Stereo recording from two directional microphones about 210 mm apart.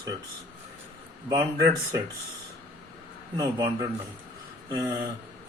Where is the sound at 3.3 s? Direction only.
15° right (ahead or behind).